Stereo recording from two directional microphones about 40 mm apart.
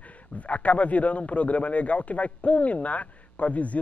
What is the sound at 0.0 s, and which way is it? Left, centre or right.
A man's voice, left.